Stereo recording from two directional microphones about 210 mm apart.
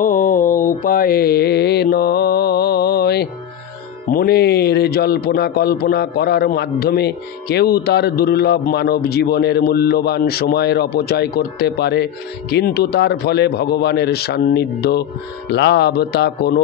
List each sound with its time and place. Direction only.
0.0 s mantra: 40° left (ahead or behind)
4.1 s speech: 45° left (ahead or behind)